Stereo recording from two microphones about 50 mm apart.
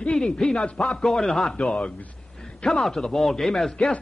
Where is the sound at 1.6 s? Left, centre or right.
Left.